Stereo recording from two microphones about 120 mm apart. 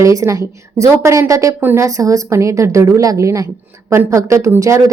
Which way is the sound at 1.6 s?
15° right (ahead or behind).